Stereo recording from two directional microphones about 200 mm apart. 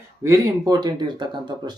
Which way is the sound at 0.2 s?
15° right (ahead or behind).